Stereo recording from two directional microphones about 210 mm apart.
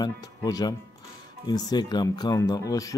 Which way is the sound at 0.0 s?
15° left (ahead or behind).